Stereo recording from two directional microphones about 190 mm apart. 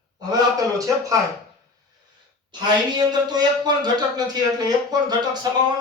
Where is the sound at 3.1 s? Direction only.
20° right (ahead or behind).